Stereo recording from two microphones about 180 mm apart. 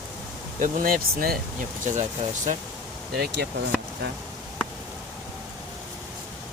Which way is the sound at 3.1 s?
65° right (ahead or behind).